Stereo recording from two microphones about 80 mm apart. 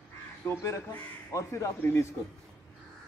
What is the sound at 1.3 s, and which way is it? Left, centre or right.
Speech, left.